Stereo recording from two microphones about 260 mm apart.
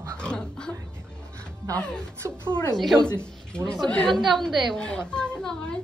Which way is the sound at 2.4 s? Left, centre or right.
Centre.